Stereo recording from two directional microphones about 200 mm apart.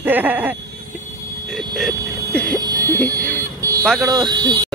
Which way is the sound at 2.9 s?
5° left (ahead or behind).